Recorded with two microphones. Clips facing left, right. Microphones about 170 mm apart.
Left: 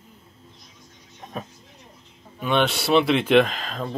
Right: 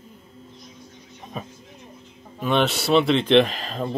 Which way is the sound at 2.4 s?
Centre (ahead or behind).